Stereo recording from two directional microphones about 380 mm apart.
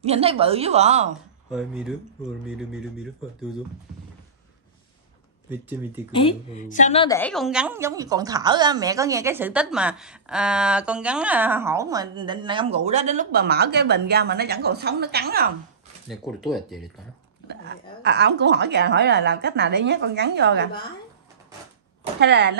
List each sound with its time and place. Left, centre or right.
0.0 s a woman's voice: centre
1.5 s speech: centre
5.5 s speech: centre
6.1 s a woman's voice: centre; by 15.5 s right
16.1 s speech: centre
17.5 s speech: right
22.2 s speech: right